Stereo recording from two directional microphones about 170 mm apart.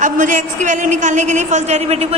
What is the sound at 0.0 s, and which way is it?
A woman's voice, 50° right (ahead or behind).